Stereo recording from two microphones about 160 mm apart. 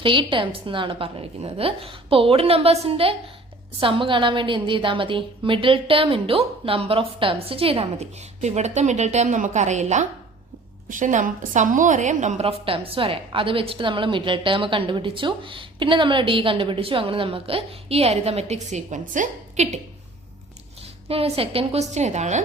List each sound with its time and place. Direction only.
0.0 s a woman's voice: 30° right (ahead or behind); by 19.8 s 50° right (ahead or behind)
21.1 s a woman's voice: 35° right (ahead or behind)